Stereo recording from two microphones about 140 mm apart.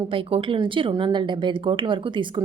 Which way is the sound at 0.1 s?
40° right (ahead or behind).